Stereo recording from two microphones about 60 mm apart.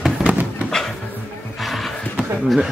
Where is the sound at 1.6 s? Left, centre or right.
Centre.